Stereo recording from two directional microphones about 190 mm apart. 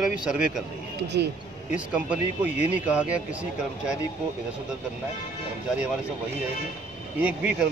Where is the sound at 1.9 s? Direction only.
5° right (ahead or behind).